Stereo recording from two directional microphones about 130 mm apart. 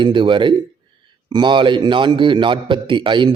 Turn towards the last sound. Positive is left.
turn(degrees=-40)  # may be behind; listen again after turning